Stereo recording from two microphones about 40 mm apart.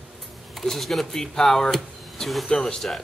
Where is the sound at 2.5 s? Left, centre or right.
Left.